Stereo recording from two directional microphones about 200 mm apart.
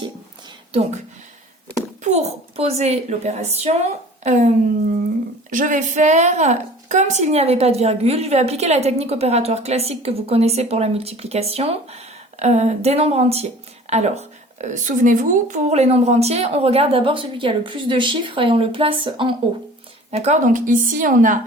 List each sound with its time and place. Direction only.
2.0 s a woman's voice: 35° right (ahead or behind)
5.5 s a woman's voice: 40° right (ahead or behind)